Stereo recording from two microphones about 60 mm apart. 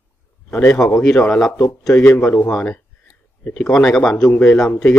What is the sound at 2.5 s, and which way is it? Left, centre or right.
Speech, centre.